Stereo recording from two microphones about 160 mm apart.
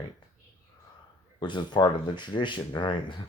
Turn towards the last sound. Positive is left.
turn(degrees=30)  # may be behind; listen again after turning